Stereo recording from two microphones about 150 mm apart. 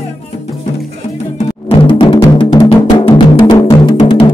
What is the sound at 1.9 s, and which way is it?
Music, 30° left (ahead or behind).